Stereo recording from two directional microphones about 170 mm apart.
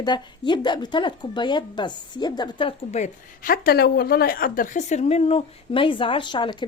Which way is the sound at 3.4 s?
55° left (ahead or behind).